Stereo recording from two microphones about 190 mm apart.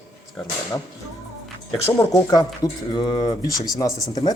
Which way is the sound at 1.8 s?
15° left (ahead or behind).